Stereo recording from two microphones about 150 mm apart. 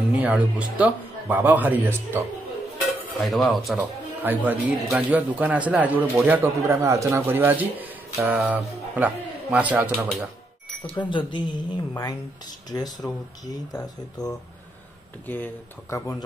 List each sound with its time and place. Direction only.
0.2 s speech: 10° right (ahead or behind)
3.1 s dishes: centre (ahead or behind)
4.2 s speech: 10° right (ahead or behind)
11.0 s a woman's voice: 30° left (ahead or behind)
15.2 s speech: 10° left (ahead or behind)